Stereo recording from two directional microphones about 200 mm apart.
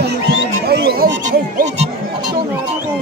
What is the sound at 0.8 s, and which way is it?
Music, 50° right (ahead or behind).